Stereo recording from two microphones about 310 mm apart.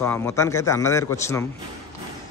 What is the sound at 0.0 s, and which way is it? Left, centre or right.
A man's voice, centre.